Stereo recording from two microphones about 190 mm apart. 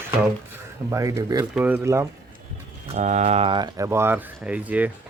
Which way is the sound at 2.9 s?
40° right (ahead or behind).